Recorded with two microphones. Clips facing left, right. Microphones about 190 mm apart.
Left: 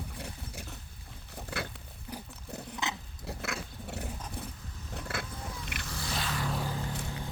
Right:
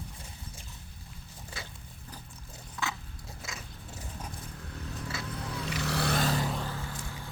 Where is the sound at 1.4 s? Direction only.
65° left (ahead or behind).